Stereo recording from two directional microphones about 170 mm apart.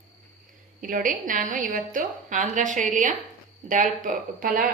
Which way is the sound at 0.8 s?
50° right (ahead or behind).